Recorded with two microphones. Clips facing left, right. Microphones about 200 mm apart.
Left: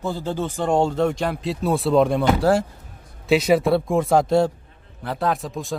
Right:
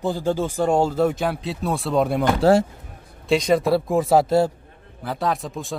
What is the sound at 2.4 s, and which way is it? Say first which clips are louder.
Speech: right 7 dB; 25° right (ahead or behind).